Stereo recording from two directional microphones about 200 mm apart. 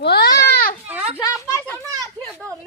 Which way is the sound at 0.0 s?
55° left (ahead or behind).